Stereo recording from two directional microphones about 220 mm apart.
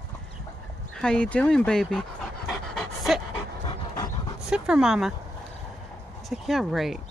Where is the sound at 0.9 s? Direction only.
5° left (ahead or behind).